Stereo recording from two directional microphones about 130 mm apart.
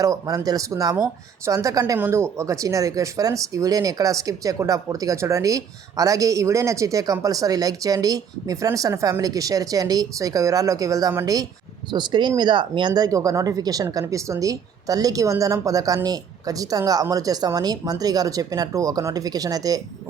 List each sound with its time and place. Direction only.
0.0 s speech: 25° right (ahead or behind)
11.9 s speech: 35° right (ahead or behind)